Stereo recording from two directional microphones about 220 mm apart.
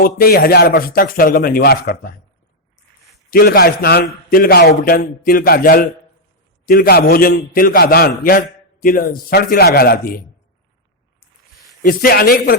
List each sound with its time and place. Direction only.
0.0 s a man's voice: 40° left (ahead or behind)
3.2 s a man's voice: 40° left (ahead or behind)
11.8 s a man's voice: 40° left (ahead or behind)